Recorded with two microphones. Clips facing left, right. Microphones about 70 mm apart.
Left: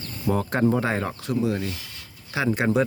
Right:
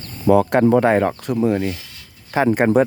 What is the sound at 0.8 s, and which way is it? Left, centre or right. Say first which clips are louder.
Speech: right 10 dB; right.